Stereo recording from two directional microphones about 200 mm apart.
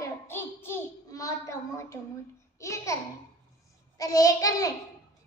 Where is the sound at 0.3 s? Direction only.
10° left (ahead or behind).